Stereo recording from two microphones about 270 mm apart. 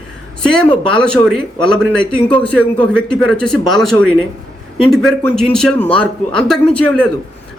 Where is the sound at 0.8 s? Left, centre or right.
Centre.